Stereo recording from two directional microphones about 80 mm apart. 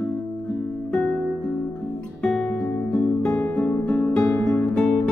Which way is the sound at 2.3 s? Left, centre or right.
Centre.